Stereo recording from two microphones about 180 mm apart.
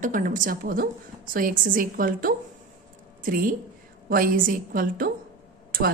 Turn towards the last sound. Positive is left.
turn(degrees=-55)  # may be behind; listen again after turning